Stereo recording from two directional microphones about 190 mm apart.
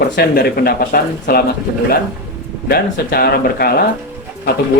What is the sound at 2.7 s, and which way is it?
Speech, 55° left (ahead or behind).